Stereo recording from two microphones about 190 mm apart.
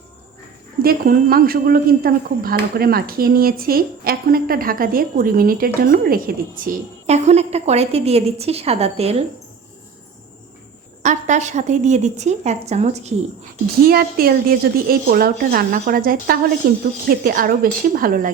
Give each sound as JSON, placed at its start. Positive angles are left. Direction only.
{"t": 0.8, "sound": "speech", "side_deg": -50}
{"t": 7.1, "sound": "a woman's voice", "side_deg": -35}
{"t": 11.0, "sound": "a woman's voice", "side_deg": -40}
{"t": 13.8, "sound": "speech", "side_deg": -50}